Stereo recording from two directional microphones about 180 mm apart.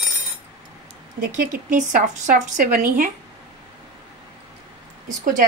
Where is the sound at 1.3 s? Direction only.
50° right (ahead or behind).